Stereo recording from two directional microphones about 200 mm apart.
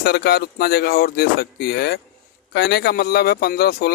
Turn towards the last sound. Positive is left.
turn(degrees=50)  # may be behind; listen again after turning